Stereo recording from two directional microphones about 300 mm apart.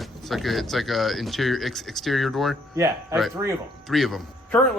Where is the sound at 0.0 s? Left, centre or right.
Centre.